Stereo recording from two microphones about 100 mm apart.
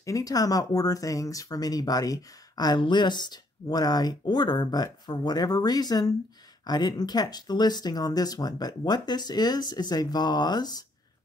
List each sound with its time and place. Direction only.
0.0 s speech: 35° left (ahead or behind)